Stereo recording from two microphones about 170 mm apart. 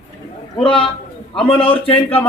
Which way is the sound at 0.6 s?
30° left (ahead or behind).